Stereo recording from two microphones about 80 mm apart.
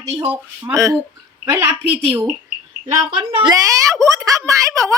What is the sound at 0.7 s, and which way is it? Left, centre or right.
Speech, right.